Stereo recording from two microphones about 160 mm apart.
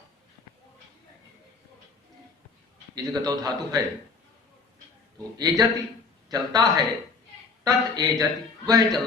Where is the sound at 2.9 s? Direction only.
20° right (ahead or behind).